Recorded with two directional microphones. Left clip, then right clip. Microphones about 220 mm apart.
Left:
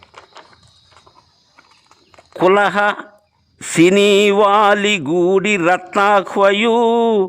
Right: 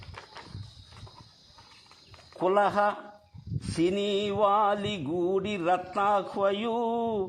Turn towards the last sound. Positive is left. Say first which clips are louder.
# left 15 dB
turn(degrees=35)  # may be behind; listen again after turning